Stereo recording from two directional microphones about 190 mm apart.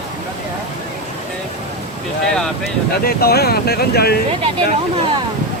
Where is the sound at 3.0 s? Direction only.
55° left (ahead or behind).